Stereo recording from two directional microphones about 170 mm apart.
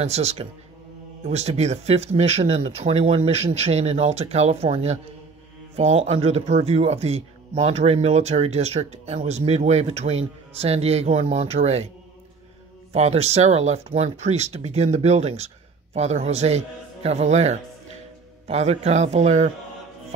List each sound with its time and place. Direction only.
0.0 s speech: 40° right (ahead or behind)
12.9 s speech: 40° right (ahead or behind)